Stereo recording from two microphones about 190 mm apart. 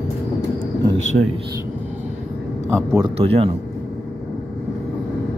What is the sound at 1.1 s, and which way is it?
Speech, 50° right (ahead or behind).